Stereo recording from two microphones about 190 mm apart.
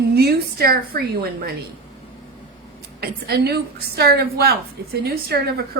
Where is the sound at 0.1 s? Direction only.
55° right (ahead or behind).